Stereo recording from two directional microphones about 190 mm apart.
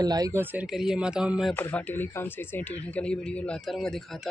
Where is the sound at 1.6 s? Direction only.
10° left (ahead or behind).